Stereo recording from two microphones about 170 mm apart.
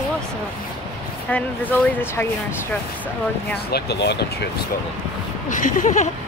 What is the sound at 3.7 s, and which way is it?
Speech, 80° left.